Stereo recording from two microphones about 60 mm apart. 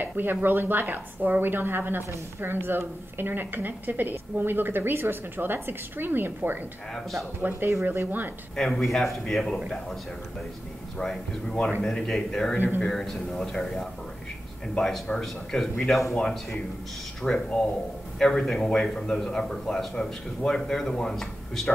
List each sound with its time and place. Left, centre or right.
0.0 s a woman's voice: right
8.5 s a man's voice: centre
11.0 s a man's voice: centre